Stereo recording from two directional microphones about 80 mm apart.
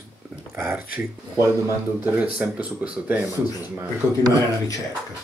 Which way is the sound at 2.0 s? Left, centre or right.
Centre.